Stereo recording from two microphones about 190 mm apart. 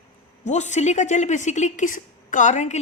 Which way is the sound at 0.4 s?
40° left (ahead or behind).